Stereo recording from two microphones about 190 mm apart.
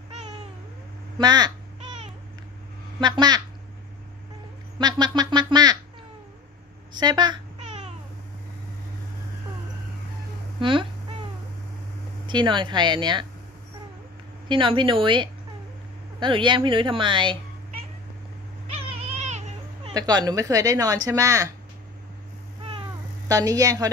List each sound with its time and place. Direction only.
1.1 s speech: 20° right (ahead or behind)
3.0 s speech: 20° right (ahead or behind)
4.7 s speech: 20° right (ahead or behind)
6.9 s speech: 25° right (ahead or behind)
7.6 s babbling: 35° right (ahead or behind)
10.6 s speech: 25° right (ahead or behind)
12.3 s speech: 25° right (ahead or behind)
14.5 s speech: 25° right (ahead or behind)
18.9 s cat: 35° right (ahead or behind)
19.9 s speech: 20° right (ahead or behind)
23.2 s speech: 20° right (ahead or behind)